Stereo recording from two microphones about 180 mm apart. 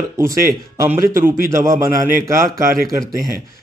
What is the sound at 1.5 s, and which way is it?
A man's voice, 15° right (ahead or behind).